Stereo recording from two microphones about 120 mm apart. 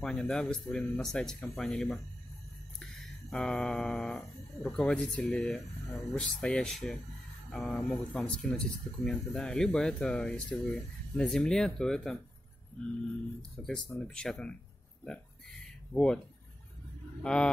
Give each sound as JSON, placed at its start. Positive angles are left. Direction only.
{"t": 0.0, "sound": "speech", "side_deg": 5}
{"t": 2.8, "sound": "a sound", "side_deg": 5}
{"t": 4.6, "sound": "speech", "side_deg": 10}
{"t": 13.6, "sound": "speech", "side_deg": 15}
{"t": 13.9, "sound": "speech", "side_deg": 5}
{"t": 15.9, "sound": "speech", "side_deg": 5}
{"t": 17.2, "sound": "speech", "side_deg": 5}